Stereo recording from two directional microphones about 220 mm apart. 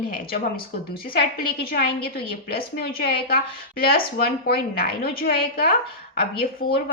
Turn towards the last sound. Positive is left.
turn(degrees=45)  # may be behind; listen again after turning